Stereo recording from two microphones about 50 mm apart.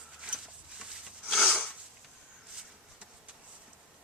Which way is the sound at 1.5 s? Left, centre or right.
Left.